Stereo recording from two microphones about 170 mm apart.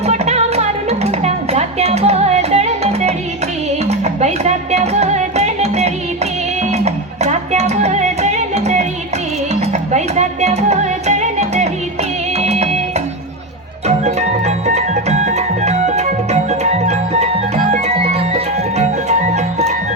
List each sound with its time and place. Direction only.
0.0 s music: 40° right (ahead or behind)
13.8 s music: 40° right (ahead or behind)